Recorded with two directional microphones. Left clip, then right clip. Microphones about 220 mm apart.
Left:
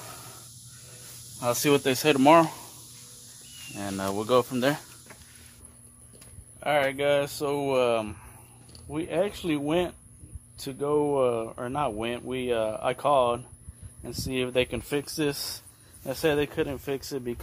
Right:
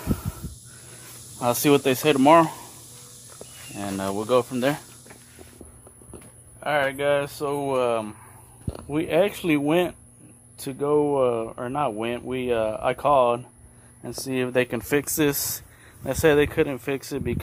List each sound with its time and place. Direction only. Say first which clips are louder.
1.4 s speech: right 4 dB; 20° right (ahead or behind)
1.9 s speech: right 1 dB; centre (ahead or behind)
3.7 s speech: right 2 dB; 5° left (ahead or behind)
6.6 s speech: right 2 dB; 5° left (ahead or behind)
8.9 s speech: right 6 dB; 50° right (ahead or behind)
9.3 s speech: right 5 dB; 30° right (ahead or behind)
10.6 s speech: right 4 dB; 10° right (ahead or behind)
16.1 s speech: right 7 dB; 25° right (ahead or behind)